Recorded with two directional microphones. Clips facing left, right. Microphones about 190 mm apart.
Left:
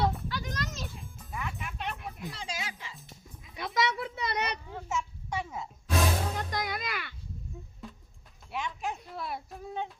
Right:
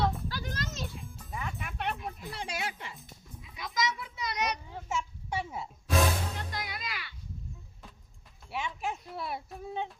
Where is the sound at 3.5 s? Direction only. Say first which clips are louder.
Left 3 dB; 60° left (ahead or behind).